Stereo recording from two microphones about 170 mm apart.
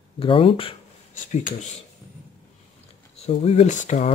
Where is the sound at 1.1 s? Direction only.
50° left (ahead or behind).